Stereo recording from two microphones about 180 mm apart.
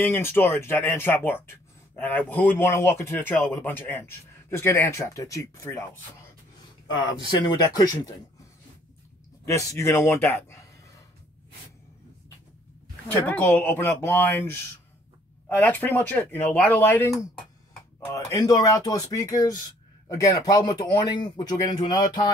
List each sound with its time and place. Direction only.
0.0 s speech: 15° left (ahead or behind)
7.2 s speech: 25° left (ahead or behind)
9.5 s speech: 15° left (ahead or behind)
13.3 s speech: 10° left (ahead or behind); by 22.3 s 25° left (ahead or behind)